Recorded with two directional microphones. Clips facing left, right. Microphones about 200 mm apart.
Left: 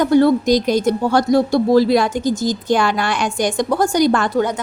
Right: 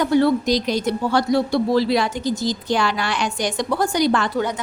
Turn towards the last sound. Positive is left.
turn(degrees=45)  # may be behind; listen again after turning